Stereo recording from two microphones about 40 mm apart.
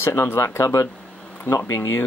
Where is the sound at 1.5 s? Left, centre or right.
Left.